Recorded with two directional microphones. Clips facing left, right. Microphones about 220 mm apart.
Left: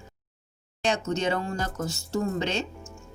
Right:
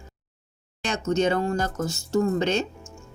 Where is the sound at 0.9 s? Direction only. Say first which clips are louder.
Right 4 dB; 45° right (ahead or behind).